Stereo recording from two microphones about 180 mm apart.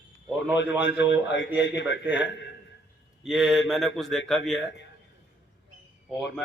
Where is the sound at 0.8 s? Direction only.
80° left.